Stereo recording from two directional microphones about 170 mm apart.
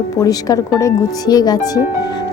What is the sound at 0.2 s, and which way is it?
Speech, 20° left (ahead or behind).